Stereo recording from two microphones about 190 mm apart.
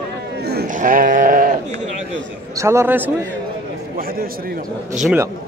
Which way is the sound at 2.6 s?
15° right (ahead or behind).